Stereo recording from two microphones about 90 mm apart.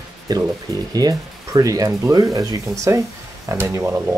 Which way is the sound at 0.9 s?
45° right (ahead or behind).